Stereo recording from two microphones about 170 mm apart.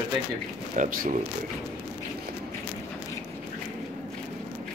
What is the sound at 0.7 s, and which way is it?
Speech, 50° right (ahead or behind).